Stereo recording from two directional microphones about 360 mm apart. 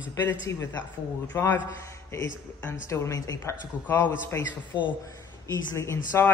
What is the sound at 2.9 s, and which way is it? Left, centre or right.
Speech, centre.